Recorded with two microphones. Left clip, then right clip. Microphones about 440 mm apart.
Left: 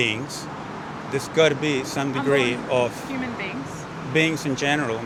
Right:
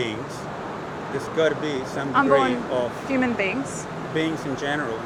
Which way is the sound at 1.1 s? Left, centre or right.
Left.